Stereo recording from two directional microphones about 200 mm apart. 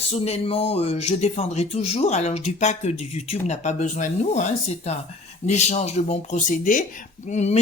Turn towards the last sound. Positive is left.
turn(degrees=35)  # may be behind; listen again after turning